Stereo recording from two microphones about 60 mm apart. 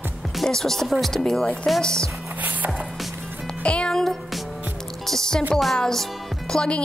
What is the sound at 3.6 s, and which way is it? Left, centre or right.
Music, centre.